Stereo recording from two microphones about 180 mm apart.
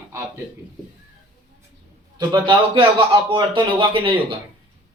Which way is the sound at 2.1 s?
25° right (ahead or behind).